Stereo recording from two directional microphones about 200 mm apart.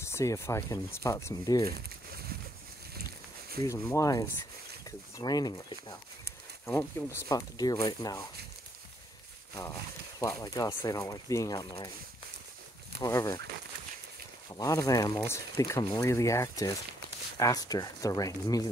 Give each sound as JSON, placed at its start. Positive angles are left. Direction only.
{"t": 0.0, "sound": "speech", "side_deg": 15}
{"t": 3.6, "sound": "speech", "side_deg": 15}
{"t": 10.2, "sound": "speech", "side_deg": 15}
{"t": 13.0, "sound": "speech", "side_deg": 15}
{"t": 14.5, "sound": "speech", "side_deg": 15}